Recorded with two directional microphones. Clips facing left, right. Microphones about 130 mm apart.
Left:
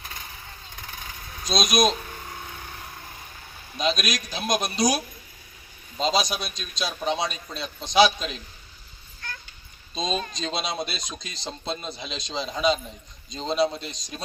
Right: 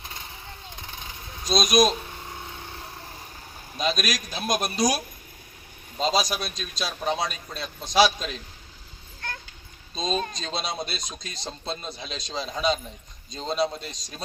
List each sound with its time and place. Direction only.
0.0 s vehicle: 25° right (ahead or behind)
1.5 s a man's voice: centre (ahead or behind)
2.0 s a sound: 25° right (ahead or behind)
3.8 s a man's voice: centre (ahead or behind)
9.9 s a man's voice: centre (ahead or behind)